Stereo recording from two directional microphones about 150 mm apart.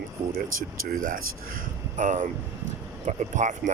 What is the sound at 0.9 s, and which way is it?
Speech, 70° right (ahead or behind).